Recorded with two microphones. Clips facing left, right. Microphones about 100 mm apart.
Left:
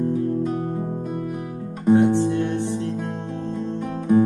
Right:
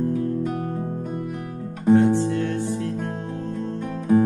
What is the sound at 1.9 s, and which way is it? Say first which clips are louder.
Music: even; 20° left (ahead or behind).